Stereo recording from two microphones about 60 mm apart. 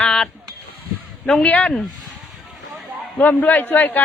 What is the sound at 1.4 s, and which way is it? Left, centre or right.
Speech, left.